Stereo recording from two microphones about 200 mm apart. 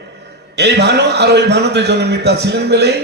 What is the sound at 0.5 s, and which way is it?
A man's voice, 55° right (ahead or behind).